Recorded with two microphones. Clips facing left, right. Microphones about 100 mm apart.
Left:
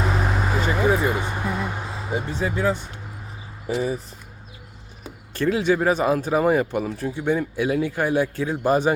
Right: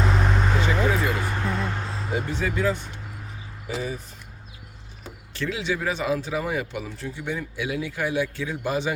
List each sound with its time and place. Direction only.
0.0 s vehicle: 5° left (ahead or behind)
0.9 s a sound: 20° left (ahead or behind)
2.1 s speech: 20° left (ahead or behind)
5.3 s speech: 50° left (ahead or behind)